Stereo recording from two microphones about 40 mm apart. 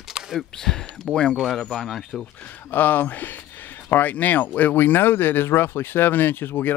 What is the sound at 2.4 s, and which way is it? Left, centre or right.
Speech, left.